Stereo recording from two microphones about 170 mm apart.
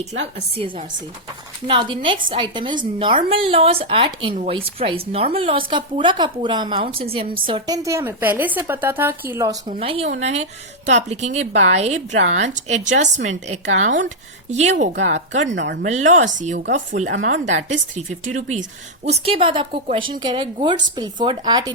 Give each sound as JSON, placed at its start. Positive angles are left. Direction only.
{"t": 0.5, "sound": "a woman's voice", "side_deg": -35}
{"t": 7.8, "sound": "a woman's voice", "side_deg": -15}
{"t": 9.8, "sound": "a woman's voice", "side_deg": -35}
{"t": 15.4, "sound": "speech", "side_deg": -90}
{"t": 15.8, "sound": "a woman's voice", "side_deg": -45}